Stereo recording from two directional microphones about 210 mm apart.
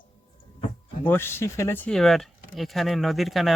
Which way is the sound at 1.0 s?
10° left (ahead or behind).